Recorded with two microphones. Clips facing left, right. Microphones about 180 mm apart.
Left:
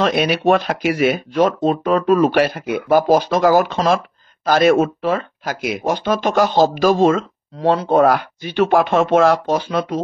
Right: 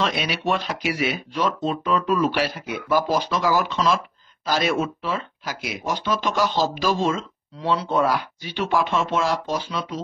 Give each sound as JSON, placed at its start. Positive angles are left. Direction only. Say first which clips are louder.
{"t": 0.0, "sound": "speech", "louder": "left 8 dB", "side_deg": 50}